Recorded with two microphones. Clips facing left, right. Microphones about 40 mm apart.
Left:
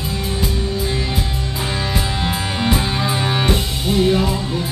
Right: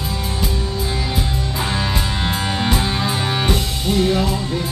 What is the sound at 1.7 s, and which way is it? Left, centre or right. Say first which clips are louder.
Music: even; centre.